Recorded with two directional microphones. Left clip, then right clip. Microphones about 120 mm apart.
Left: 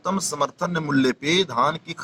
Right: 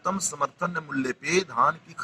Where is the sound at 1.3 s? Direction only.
45° left (ahead or behind).